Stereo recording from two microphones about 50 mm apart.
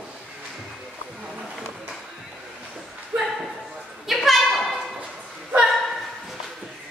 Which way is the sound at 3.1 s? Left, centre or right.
Right.